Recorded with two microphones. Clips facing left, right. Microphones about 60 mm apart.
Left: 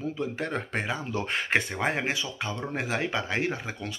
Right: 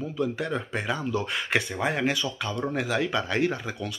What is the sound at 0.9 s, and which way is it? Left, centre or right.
Speech, left.